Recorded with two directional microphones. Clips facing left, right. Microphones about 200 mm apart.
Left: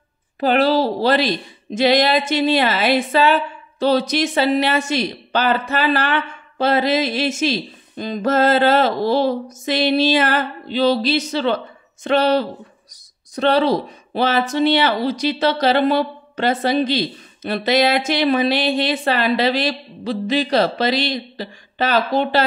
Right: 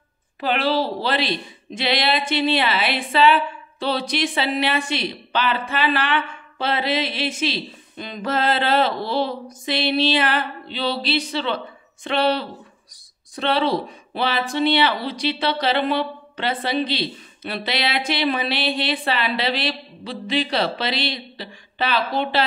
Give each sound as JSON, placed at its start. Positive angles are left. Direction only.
{"t": 0.4, "sound": "speech", "side_deg": 40}